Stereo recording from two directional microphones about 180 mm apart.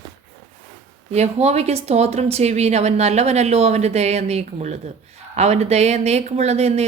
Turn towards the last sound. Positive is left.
turn(degrees=-35)  # may be behind; listen again after turning